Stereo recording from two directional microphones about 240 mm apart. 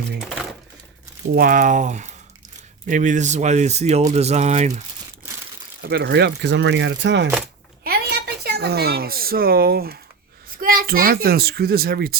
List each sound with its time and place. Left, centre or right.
1.3 s a child's voice: right
5.8 s chopping: right
7.9 s a sound: right
10.6 s a child's voice: right